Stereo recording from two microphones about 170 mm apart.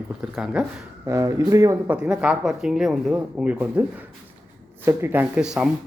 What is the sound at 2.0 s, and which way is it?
Speech, 5° right (ahead or behind).